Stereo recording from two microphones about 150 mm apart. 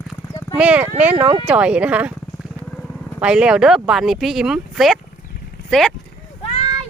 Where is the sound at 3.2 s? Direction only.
5° right (ahead or behind).